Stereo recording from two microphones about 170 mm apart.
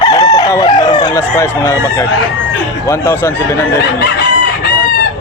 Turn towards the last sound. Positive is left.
turn(degrees=15)  # may be behind; listen again after turning